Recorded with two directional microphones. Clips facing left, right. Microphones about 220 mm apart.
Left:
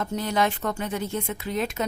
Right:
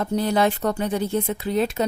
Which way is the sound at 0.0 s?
35° right (ahead or behind).